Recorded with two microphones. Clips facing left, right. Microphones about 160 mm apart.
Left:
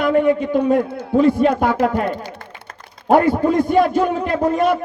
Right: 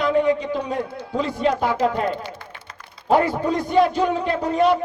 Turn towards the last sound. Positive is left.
turn(degrees=50)  # may be behind; listen again after turning